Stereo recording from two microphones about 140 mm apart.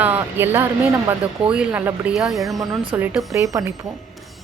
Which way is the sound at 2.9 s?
15° right (ahead or behind).